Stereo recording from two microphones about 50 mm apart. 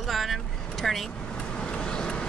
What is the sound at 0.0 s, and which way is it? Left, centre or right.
Vehicle, centre.